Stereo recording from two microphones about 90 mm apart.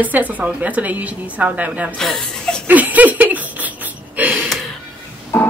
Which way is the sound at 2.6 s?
20° right (ahead or behind).